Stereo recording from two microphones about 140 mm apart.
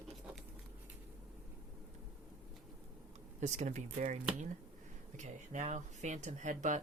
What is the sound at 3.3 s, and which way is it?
Speech, 55° right (ahead or behind).